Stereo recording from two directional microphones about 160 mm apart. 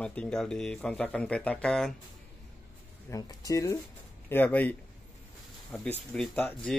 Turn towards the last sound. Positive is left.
turn(degrees=10)  # may be behind; listen again after turning